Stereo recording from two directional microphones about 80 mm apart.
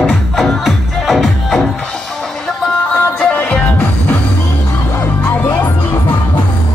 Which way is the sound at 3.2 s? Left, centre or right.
Centre.